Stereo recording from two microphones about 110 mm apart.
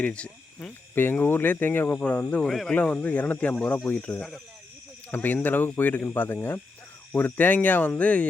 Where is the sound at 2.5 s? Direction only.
Centre (ahead or behind).